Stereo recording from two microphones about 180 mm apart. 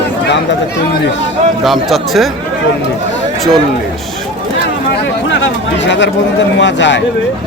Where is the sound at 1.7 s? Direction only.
Centre (ahead or behind).